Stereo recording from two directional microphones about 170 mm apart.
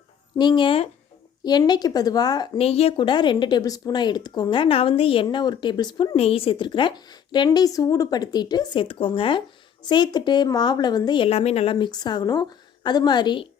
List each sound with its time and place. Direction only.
0.3 s speech: 25° left (ahead or behind)
2.6 s speech: 35° left (ahead or behind)